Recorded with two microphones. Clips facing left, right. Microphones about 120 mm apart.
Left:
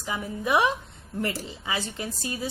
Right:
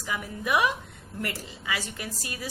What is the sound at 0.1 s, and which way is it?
A woman's voice, 25° left (ahead or behind).